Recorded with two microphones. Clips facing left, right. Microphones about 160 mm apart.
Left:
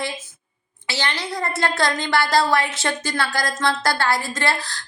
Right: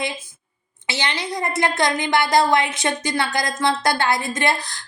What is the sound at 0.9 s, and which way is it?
A woman's voice, 20° right (ahead or behind).